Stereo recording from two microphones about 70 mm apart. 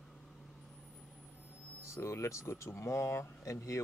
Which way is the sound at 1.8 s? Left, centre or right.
Left.